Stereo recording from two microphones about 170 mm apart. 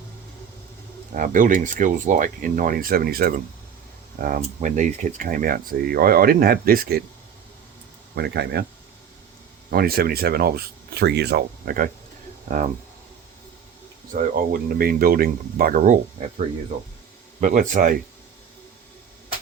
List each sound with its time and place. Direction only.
1.1 s speech: 55° right (ahead or behind)
4.4 s speech: 45° right (ahead or behind); by 7.0 s 60° right (ahead or behind)
8.1 s speech: 70° right (ahead or behind)
9.6 s speech: 65° right (ahead or behind)
14.1 s speech: 60° right (ahead or behind)
17.4 s speech: 50° right (ahead or behind)